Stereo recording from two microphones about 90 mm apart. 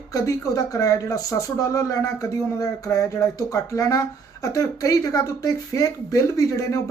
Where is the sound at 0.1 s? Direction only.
40° left (ahead or behind).